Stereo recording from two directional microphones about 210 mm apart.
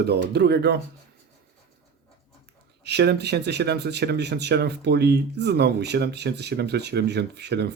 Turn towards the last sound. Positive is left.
turn(degrees=-50)  # may be behind; listen again after turning